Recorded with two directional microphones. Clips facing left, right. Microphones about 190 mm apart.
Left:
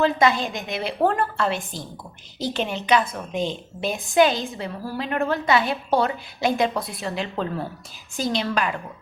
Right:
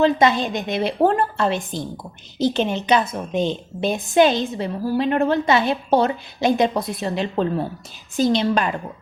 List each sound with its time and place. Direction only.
0.0 s a woman's voice: 20° right (ahead or behind)